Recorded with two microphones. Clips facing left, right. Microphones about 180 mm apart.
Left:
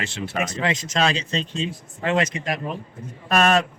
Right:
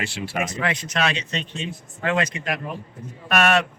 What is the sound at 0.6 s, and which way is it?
A man's voice, 25° left (ahead or behind).